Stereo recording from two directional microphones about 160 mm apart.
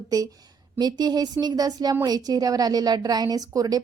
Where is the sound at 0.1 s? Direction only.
20° right (ahead or behind).